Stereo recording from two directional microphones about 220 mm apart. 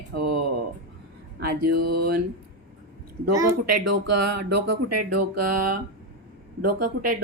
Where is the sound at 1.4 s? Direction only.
45° right (ahead or behind).